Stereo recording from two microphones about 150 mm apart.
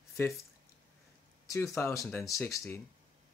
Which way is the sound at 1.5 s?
20° left (ahead or behind).